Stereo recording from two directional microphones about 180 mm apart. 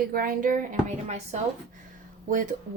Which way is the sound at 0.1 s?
50° right (ahead or behind).